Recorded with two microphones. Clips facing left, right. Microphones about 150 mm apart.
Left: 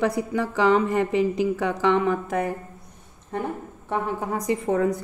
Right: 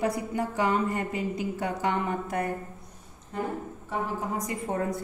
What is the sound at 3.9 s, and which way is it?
Speech, 70° left (ahead or behind).